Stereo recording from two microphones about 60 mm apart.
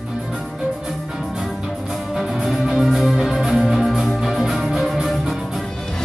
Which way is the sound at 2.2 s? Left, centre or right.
Centre.